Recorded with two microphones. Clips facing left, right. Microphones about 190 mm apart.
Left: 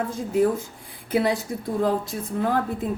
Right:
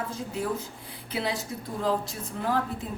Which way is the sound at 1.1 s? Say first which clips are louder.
Left 8 dB; 50° left (ahead or behind).